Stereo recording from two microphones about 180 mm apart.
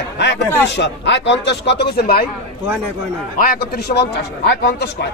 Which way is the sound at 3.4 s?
60° left (ahead or behind).